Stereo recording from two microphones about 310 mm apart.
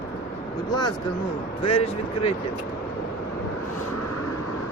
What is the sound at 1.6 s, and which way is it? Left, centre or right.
Speech, centre.